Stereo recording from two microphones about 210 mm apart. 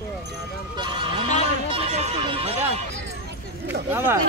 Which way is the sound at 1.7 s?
25° right (ahead or behind).